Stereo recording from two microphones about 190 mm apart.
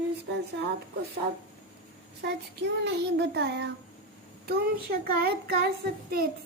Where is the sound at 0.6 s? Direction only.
70° right (ahead or behind).